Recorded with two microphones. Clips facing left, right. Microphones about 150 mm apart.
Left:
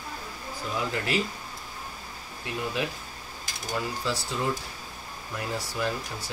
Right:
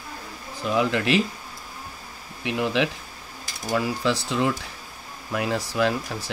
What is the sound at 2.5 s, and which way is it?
Speech, 80° right.